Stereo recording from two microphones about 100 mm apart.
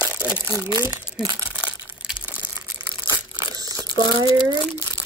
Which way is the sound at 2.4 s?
55° left (ahead or behind).